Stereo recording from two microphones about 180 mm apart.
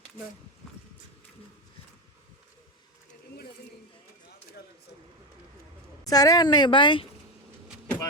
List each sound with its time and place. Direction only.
6.1 s a woman's voice: 20° left (ahead or behind)
7.7 s bee: 5° left (ahead or behind)